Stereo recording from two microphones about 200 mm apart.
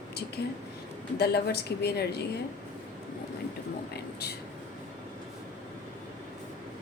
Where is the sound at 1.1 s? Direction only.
55° left (ahead or behind).